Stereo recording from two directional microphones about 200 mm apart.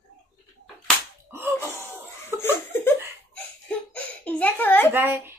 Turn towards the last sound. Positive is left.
turn(degrees=-10)  # may be behind; listen again after turning